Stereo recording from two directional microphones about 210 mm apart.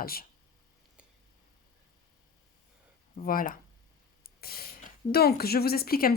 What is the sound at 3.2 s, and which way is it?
A woman's voice, 40° left (ahead or behind).